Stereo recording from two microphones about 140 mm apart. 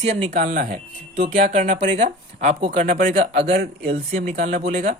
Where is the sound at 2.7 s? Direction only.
75° right (ahead or behind).